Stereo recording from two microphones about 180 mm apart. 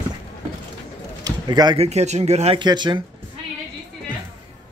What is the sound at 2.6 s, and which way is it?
Speech, 25° right (ahead or behind).